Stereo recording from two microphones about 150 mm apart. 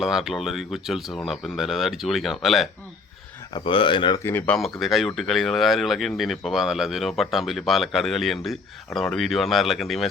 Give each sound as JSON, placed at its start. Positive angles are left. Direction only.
{"t": 0.0, "sound": "speech", "side_deg": -5}
{"t": 3.5, "sound": "speech", "side_deg": 35}
{"t": 4.2, "sound": "speech", "side_deg": 15}